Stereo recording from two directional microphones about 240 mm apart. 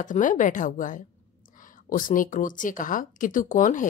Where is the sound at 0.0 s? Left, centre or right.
Left.